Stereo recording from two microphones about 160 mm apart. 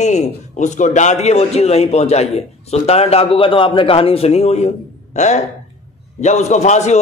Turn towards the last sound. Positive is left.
turn(degrees=45)  # may be behind; listen again after turning